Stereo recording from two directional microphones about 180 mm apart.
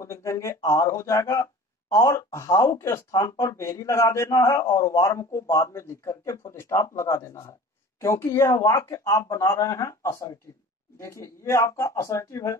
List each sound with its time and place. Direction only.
0.0 s speech: 15° left (ahead or behind)